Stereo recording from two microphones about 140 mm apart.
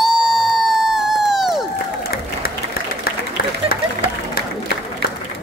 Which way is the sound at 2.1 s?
90° left.